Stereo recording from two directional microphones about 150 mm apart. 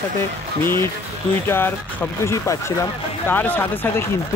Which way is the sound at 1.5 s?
15° left (ahead or behind).